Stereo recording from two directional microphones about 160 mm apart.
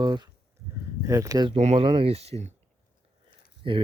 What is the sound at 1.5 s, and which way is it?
Speech, 40° right (ahead or behind).